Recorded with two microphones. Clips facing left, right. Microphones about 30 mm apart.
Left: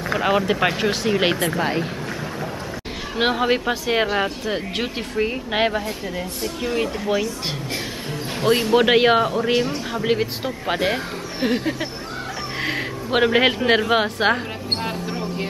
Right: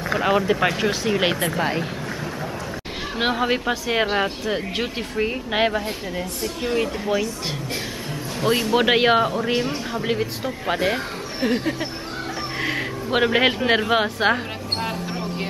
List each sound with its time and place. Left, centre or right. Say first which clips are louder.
0.1 s speech: even; centre
3.2 s speech: left 2 dB; centre
8.4 s speech: left 2 dB; centre
8.7 s speech: left 2 dB; centre
12.5 s a sound: left 1 dB; centre